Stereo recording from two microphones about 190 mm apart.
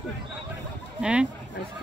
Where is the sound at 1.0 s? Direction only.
5° right (ahead or behind).